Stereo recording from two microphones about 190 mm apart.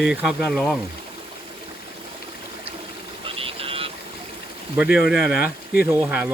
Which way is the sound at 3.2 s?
30° right (ahead or behind).